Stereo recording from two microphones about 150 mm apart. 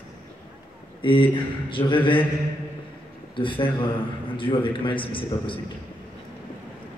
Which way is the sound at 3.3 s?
35° left (ahead or behind).